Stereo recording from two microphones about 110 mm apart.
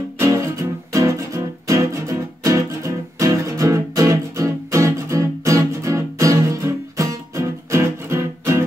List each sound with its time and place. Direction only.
0.2 s music: 30° right (ahead or behind)